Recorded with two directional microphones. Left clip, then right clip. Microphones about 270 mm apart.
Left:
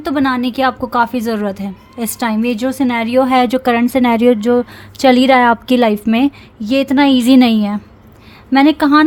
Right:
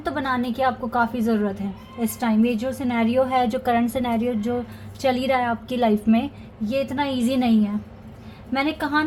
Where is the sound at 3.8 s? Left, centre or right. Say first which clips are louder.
Left 11 dB; left.